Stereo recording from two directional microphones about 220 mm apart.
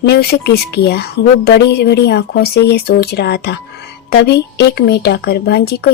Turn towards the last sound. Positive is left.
turn(degrees=45)  # may be behind; listen again after turning